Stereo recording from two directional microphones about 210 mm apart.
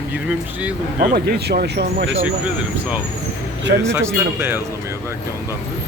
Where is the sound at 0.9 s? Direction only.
40° right (ahead or behind).